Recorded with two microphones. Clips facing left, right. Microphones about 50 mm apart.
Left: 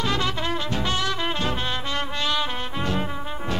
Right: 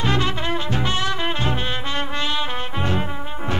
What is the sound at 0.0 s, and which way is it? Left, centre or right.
Brass instrument, right.